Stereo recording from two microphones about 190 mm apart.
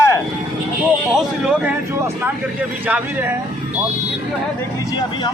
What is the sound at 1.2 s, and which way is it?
Speech, 5° right (ahead or behind).